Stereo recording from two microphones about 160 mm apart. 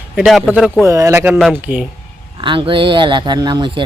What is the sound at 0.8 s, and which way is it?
Speech, 20° right (ahead or behind).